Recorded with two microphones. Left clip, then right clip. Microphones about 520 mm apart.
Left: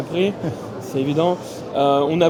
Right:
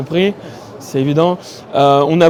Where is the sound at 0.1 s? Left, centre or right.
Right.